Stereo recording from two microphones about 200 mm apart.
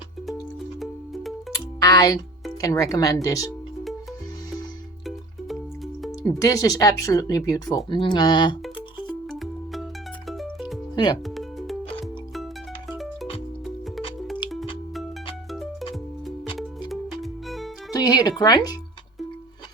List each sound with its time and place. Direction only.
0.8 s music: centre (ahead or behind)
1.5 s music: 15° left (ahead or behind)
2.6 s speech: 15° left (ahead or behind)
6.1 s speech: 15° left (ahead or behind)
8.6 s music: centre (ahead or behind)
10.9 s speech: 20° left (ahead or behind)
15.5 s music: centre (ahead or behind)
17.9 s speech: 20° left (ahead or behind)